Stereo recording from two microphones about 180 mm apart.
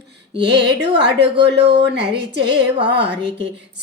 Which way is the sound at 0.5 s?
70° right (ahead or behind).